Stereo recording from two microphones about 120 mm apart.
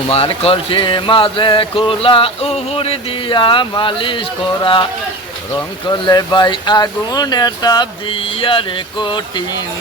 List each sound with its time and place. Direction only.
0.1 s speech: 55° left (ahead or behind)
5.9 s speech: 35° left (ahead or behind)